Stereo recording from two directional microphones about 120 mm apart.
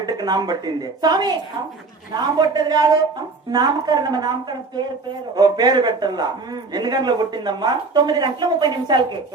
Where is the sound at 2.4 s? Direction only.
35° right (ahead or behind).